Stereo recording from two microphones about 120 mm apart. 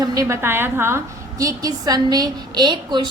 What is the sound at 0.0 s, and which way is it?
A woman's voice, 30° right (ahead or behind).